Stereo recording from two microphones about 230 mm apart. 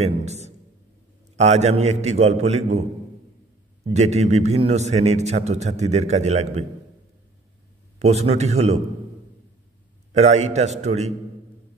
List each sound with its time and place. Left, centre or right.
0.0 s a sound: right
1.3 s a man's voice: right
3.9 s a man's voice: right
8.0 s a man's voice: right
10.1 s a man's voice: right